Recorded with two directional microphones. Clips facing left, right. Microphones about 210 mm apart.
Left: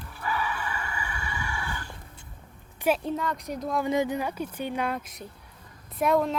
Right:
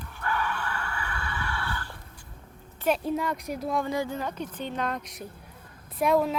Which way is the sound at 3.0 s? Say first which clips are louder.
Right 1 dB; 10° right (ahead or behind).